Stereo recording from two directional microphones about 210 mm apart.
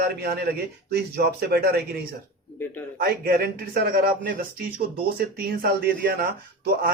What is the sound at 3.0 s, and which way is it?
A man's voice, 45° right (ahead or behind).